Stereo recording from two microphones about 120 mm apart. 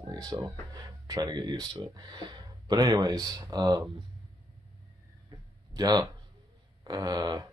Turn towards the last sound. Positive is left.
turn(degrees=-30)  # may be behind; listen again after turning